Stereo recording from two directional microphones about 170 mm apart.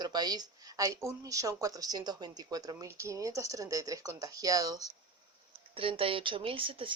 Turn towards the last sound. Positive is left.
turn(degrees=-30)  # may be behind; listen again after turning